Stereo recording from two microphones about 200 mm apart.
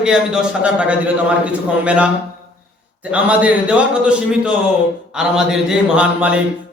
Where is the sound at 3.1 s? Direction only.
5° right (ahead or behind).